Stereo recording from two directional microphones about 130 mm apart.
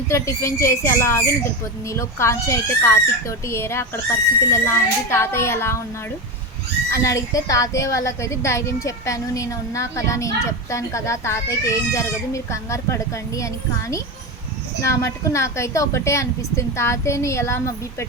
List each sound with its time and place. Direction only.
0.1 s a woman's voice: 20° left (ahead or behind)
6.9 s a woman's voice: 25° left (ahead or behind)